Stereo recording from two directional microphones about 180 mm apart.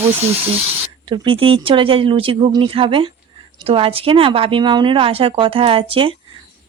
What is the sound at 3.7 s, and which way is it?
Sanding, 30° right (ahead or behind).